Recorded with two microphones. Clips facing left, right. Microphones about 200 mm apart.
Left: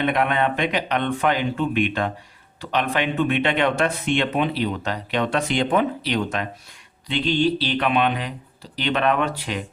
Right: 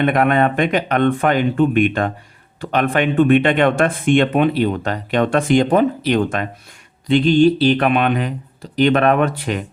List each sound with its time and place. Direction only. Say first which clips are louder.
0.0 s speech: right 6 dB; 50° right (ahead or behind)